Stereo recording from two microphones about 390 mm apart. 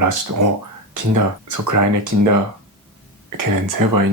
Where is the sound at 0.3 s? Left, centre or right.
Right.